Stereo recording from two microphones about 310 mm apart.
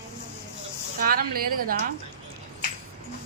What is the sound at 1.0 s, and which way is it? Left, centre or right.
Speech, right.